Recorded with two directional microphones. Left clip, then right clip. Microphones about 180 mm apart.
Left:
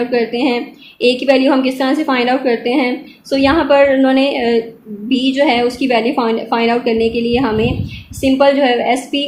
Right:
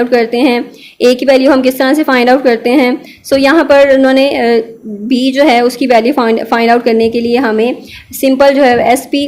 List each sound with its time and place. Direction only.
0.1 s a woman's voice: 50° right (ahead or behind)